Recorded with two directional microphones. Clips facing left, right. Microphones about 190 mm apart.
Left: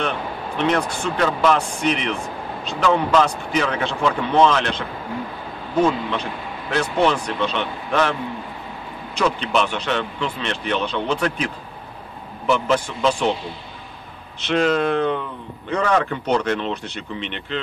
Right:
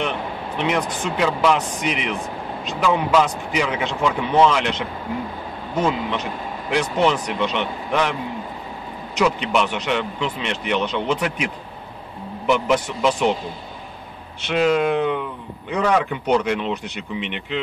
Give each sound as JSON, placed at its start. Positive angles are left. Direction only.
{"t": 0.6, "sound": "speech", "side_deg": -15}
{"t": 6.7, "sound": "speech", "side_deg": -15}
{"t": 9.2, "sound": "speech", "side_deg": -10}
{"t": 14.4, "sound": "speech", "side_deg": -10}